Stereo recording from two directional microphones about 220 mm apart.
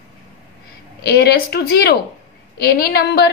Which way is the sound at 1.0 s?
45° left (ahead or behind).